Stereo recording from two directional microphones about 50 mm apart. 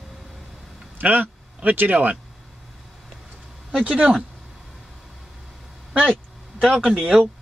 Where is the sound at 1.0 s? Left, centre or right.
Right.